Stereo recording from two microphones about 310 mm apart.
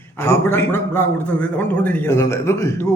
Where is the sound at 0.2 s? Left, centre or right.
Centre.